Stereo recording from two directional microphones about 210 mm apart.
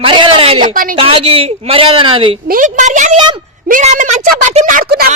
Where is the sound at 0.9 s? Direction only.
25° right (ahead or behind).